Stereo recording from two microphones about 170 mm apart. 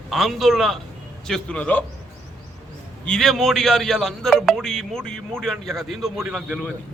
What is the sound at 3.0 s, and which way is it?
A man's voice, 5° left (ahead or behind).